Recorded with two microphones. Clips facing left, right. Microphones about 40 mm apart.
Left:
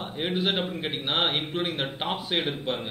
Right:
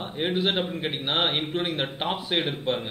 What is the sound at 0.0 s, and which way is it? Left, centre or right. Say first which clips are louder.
A man's voice: right 2 dB; centre.